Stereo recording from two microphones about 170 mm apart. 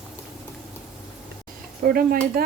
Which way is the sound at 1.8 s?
60° right (ahead or behind).